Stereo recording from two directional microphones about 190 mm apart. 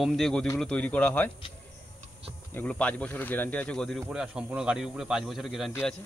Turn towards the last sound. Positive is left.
turn(degrees=10)  # may be behind; listen again after turning